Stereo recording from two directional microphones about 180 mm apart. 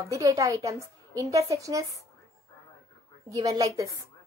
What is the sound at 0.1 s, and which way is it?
Speech, 15° right (ahead or behind).